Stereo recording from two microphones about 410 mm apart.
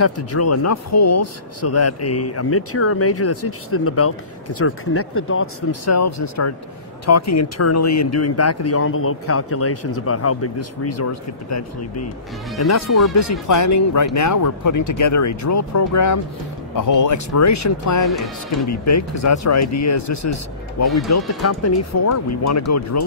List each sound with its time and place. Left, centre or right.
0.0 s speech: left
18.1 s speech: centre
18.7 s speech: left